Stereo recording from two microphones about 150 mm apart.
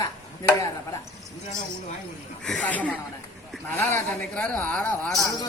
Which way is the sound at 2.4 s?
5° left (ahead or behind).